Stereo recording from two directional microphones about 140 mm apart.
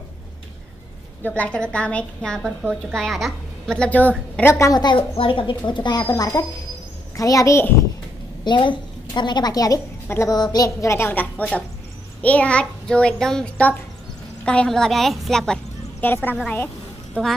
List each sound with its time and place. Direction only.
1.2 s a child's voice: 10° left (ahead or behind)
4.4 s a woman's voice: 20° left (ahead or behind)
8.5 s a woman's voice: 35° left (ahead or behind); by 17.3 s 5° left (ahead or behind)